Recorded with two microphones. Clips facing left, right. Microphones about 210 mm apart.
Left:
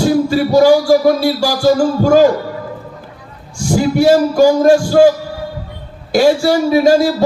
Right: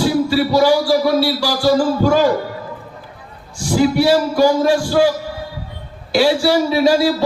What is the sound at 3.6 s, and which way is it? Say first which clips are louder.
Speech: left 2 dB; 45° left (ahead or behind).